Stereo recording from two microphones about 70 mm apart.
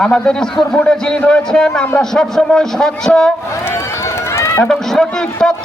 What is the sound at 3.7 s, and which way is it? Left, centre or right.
Run, left.